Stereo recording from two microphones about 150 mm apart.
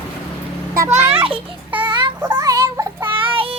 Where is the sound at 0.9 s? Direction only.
35° right (ahead or behind).